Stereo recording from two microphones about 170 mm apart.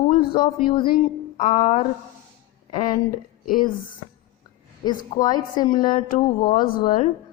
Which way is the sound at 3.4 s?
55° left (ahead or behind).